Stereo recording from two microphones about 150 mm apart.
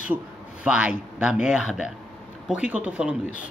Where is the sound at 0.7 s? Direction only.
5° right (ahead or behind).